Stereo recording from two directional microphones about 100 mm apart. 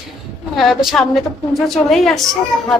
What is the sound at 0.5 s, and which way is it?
A woman's voice, centre (ahead or behind).